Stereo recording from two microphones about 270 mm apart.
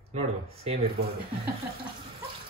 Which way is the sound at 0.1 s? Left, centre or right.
Right.